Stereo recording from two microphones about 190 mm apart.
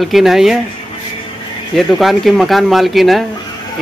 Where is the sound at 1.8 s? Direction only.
Centre (ahead or behind).